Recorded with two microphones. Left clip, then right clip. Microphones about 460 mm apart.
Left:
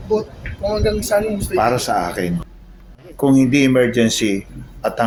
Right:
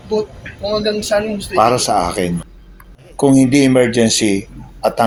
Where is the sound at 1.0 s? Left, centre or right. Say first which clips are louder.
Right 1 dB; left.